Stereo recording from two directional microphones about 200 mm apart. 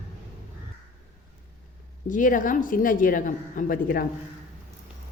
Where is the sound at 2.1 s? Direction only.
40° left (ahead or behind).